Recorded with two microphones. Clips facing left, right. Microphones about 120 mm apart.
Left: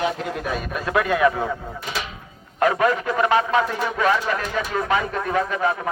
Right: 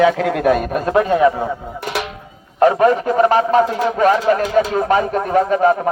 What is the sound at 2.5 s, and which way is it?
A man's voice, 30° right (ahead or behind).